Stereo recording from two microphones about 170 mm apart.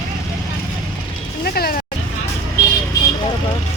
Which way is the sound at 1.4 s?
60° left (ahead or behind).